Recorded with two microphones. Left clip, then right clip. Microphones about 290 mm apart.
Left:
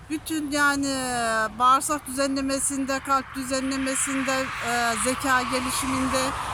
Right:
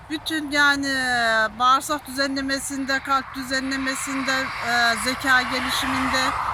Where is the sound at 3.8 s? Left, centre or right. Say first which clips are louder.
Right 1 dB; centre.